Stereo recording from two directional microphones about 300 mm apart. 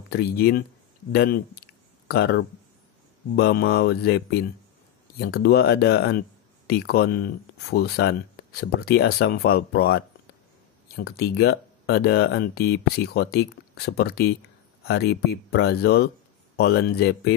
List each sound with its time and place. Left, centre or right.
0.1 s speech: left